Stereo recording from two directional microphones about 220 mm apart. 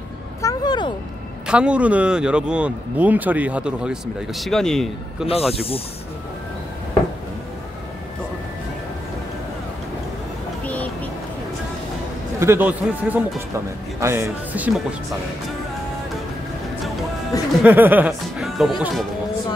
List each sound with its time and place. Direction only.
0.4 s a sound: 15° left (ahead or behind)
1.5 s speech: 5° right (ahead or behind)
5.5 s speech: 25° left (ahead or behind)
10.6 s vehicle: 5° left (ahead or behind)
12.4 s speech: 10° right (ahead or behind)
17.3 s music: 15° left (ahead or behind)
17.6 s speech: 10° right (ahead or behind)